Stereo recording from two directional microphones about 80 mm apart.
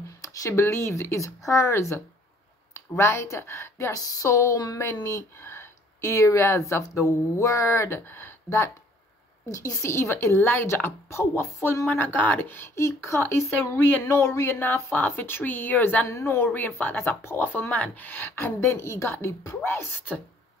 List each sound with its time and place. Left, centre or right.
0.2 s a woman's voice: left
9.5 s a woman's voice: left
11.9 s speech: left
16.1 s speech: left
17.5 s speech: centre